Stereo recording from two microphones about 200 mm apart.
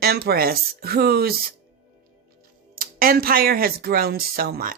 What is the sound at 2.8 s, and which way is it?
Speech, 45° right (ahead or behind).